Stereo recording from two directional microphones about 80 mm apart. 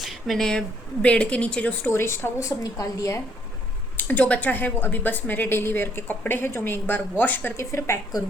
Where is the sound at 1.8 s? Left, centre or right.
Left.